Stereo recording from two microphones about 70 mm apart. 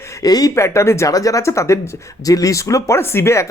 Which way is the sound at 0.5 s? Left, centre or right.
Left.